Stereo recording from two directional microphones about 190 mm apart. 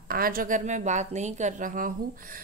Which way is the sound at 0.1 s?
50° right (ahead or behind).